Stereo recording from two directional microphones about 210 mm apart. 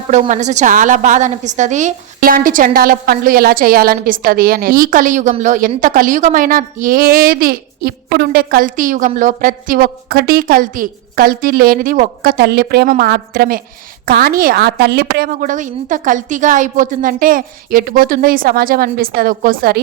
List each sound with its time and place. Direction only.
0.1 s a woman's voice: 35° right (ahead or behind)